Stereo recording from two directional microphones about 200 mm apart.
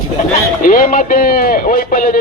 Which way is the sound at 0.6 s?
45° left (ahead or behind).